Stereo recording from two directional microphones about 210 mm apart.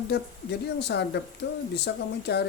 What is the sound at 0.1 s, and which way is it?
Speech, 50° left (ahead or behind).